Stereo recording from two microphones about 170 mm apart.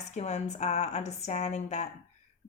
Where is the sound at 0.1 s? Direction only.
40° left (ahead or behind).